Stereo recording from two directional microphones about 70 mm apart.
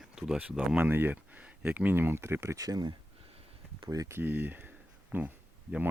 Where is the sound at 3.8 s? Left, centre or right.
Right.